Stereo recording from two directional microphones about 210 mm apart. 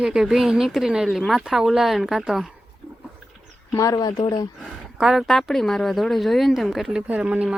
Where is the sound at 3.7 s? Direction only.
15° left (ahead or behind).